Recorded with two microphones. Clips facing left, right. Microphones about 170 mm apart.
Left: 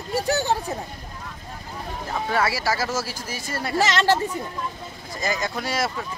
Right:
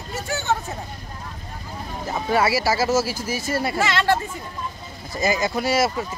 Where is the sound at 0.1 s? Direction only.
35° left (ahead or behind).